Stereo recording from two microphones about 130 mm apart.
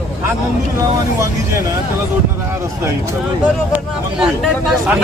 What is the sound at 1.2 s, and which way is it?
Speech, 25° right (ahead or behind).